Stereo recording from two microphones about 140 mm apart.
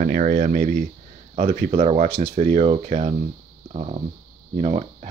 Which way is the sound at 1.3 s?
55° right (ahead or behind).